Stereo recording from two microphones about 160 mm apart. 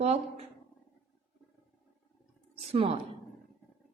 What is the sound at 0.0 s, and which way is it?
Speech, 40° right (ahead or behind).